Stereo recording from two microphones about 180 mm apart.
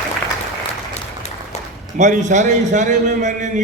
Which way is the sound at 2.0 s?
40° right (ahead or behind).